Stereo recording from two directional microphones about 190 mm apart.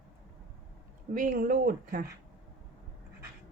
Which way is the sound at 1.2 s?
45° right (ahead or behind).